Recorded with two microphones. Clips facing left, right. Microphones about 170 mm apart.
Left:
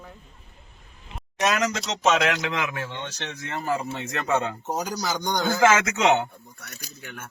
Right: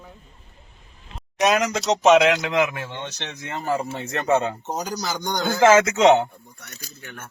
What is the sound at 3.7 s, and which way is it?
Speech, 35° right (ahead or behind).